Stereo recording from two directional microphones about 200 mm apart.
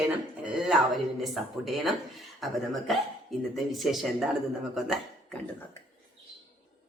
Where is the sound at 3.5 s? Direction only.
Centre (ahead or behind).